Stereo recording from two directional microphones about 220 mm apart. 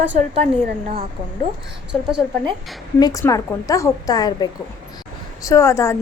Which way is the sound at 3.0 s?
15° left (ahead or behind).